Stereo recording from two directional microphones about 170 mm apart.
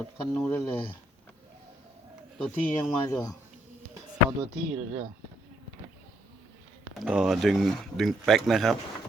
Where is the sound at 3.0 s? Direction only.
20° left (ahead or behind).